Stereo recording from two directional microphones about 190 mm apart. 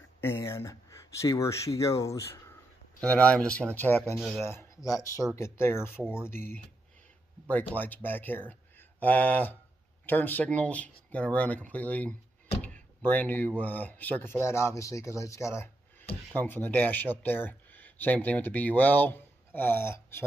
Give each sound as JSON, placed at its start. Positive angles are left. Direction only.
{"t": 0.2, "sound": "speech", "side_deg": 15}
{"t": 12.6, "sound": "a sound", "side_deg": 10}
{"t": 13.6, "sound": "speech", "side_deg": 10}